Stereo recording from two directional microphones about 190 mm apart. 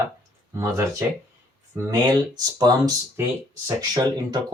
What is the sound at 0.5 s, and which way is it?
Speech, 15° right (ahead or behind).